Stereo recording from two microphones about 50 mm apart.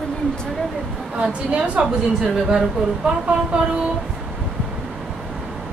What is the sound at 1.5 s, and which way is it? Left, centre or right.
A woman's voice, right.